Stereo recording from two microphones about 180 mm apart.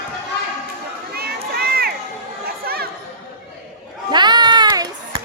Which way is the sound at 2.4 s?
60° right (ahead or behind).